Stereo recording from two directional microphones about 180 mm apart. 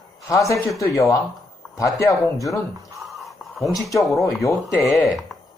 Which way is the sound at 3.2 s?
Centre (ahead or behind).